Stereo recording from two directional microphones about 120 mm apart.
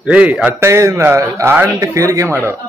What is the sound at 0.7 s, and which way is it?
A man's voice, 25° right (ahead or behind).